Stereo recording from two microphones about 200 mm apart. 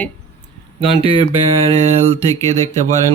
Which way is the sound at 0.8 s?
25° right (ahead or behind).